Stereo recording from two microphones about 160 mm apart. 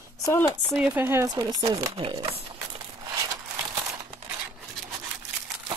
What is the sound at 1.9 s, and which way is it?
Speech, 35° right (ahead or behind).